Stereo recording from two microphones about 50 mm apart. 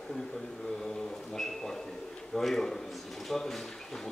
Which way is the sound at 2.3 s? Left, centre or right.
Centre.